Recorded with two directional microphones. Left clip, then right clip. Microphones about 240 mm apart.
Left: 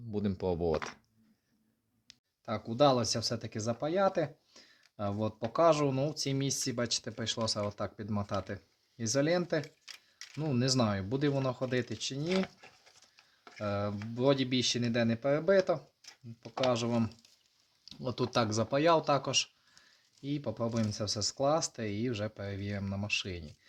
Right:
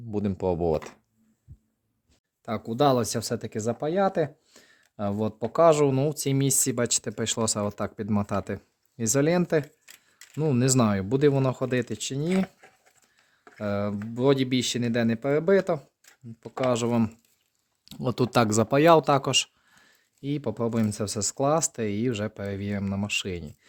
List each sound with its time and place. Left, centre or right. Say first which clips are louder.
0.1 s speech: right 7 dB; right
2.4 s speech: right 4 dB; right
9.8 s camera: left 2 dB; centre
10.3 s speech: right 7 dB; right
13.6 s speech: right 6 dB; right